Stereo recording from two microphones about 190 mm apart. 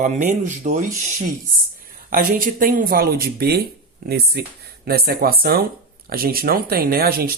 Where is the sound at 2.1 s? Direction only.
50° right (ahead or behind).